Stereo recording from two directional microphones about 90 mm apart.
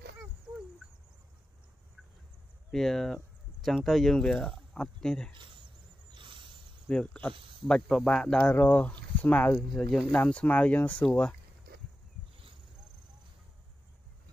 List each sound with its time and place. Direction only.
2.7 s speech: 5° left (ahead or behind)
5.3 s speech: 65° right (ahead or behind)
6.1 s a sound: 65° right (ahead or behind)
6.9 s speech: 10° left (ahead or behind)
9.6 s speech: 5° left (ahead or behind)